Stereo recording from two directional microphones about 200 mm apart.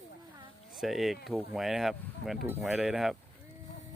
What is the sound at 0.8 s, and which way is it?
Speech, centre (ahead or behind).